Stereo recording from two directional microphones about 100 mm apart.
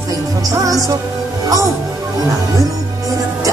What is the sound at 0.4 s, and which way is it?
Music, 35° right (ahead or behind).